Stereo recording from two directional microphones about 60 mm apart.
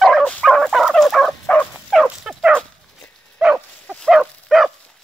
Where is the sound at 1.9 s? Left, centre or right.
Centre.